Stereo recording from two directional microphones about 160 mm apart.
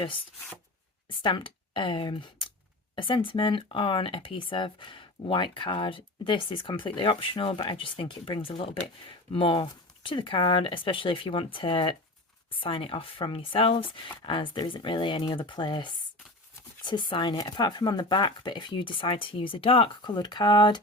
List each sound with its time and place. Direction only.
1.2 s speech: 30° left (ahead or behind)